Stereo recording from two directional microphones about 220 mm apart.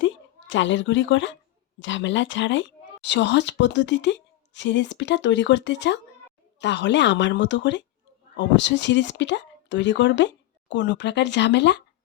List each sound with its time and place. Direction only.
0.0 s a woman's voice: 60° left (ahead or behind)